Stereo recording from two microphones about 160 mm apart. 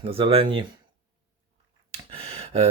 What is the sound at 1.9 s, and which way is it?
Gasp, 40° right (ahead or behind).